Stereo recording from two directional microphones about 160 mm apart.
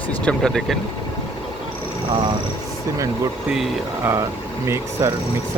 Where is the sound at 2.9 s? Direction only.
20° right (ahead or behind).